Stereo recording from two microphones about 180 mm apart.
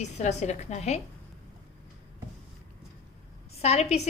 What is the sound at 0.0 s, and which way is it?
A woman's voice, 40° left (ahead or behind).